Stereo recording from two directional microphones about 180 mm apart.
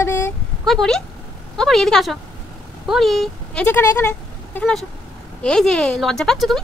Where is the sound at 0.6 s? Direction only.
Centre (ahead or behind).